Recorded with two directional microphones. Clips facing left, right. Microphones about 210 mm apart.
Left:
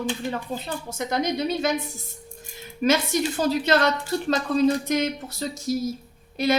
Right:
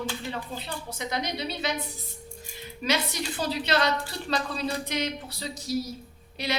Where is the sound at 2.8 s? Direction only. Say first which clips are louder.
Left 7 dB; 45° left (ahead or behind).